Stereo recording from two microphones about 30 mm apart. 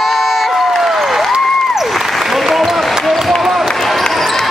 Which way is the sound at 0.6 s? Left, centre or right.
Centre.